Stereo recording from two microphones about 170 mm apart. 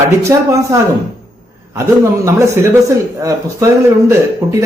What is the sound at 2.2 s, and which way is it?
A man's voice, 15° right (ahead or behind).